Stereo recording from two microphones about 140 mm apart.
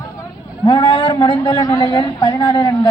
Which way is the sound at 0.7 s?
35° left (ahead or behind).